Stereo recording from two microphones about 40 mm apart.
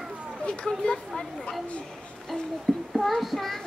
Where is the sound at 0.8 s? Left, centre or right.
Centre.